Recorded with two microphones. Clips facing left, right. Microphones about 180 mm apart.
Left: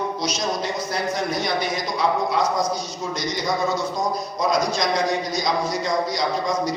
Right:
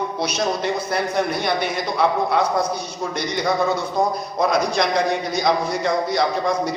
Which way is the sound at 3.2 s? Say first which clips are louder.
Right 3 dB; 60° right (ahead or behind).